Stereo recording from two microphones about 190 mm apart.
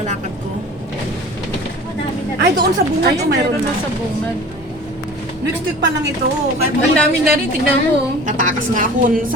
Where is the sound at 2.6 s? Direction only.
60° right (ahead or behind).